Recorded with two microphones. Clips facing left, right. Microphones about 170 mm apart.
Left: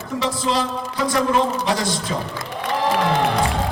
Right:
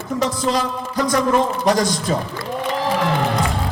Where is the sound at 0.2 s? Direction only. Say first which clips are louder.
Right 1 dB; 45° right (ahead or behind).